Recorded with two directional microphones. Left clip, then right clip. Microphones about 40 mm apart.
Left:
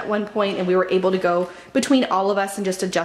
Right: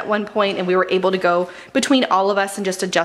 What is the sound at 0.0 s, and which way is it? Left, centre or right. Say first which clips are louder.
Speech: right 3 dB; right.